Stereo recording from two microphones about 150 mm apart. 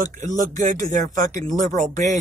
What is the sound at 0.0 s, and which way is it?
Speech, 55° right (ahead or behind).